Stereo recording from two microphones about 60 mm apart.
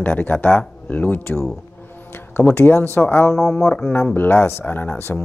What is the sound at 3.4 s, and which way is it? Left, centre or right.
Speech, centre.